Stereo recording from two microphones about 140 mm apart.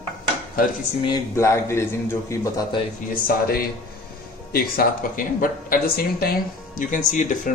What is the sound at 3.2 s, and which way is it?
Speech, 90° left.